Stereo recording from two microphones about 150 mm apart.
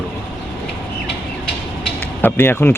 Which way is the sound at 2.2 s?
15° left (ahead or behind).